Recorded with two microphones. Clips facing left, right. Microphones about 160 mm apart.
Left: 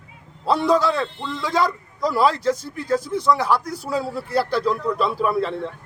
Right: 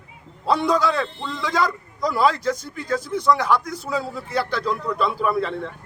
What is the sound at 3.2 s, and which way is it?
A man's voice, 5° left (ahead or behind).